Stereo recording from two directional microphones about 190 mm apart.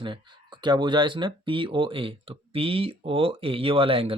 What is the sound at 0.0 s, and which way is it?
Speech, 25° right (ahead or behind).